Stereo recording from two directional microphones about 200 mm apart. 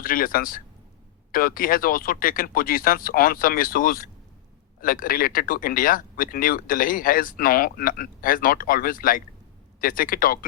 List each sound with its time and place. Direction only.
0.0 s speech: 45° left (ahead or behind)